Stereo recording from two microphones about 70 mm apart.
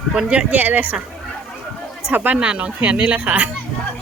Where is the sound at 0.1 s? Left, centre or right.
Centre.